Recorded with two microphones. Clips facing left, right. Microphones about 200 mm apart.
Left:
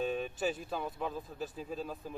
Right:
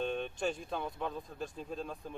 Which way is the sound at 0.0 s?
5° left (ahead or behind).